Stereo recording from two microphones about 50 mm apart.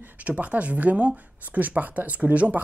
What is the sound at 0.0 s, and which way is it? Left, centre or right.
Speech, right.